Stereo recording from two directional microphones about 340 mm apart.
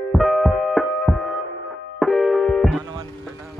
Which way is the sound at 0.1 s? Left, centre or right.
Centre.